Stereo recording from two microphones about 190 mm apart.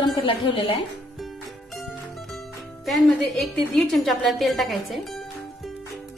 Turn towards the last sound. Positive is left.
turn(degrees=0)  # may be behind; listen again after turning